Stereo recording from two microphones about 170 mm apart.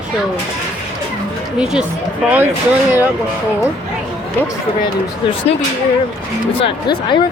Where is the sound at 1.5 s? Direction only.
5° right (ahead or behind).